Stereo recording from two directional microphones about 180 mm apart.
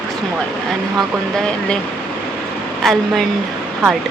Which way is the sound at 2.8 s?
Centre (ahead or behind).